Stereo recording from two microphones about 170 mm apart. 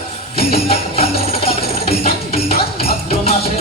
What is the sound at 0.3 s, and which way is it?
Music, 35° left (ahead or behind).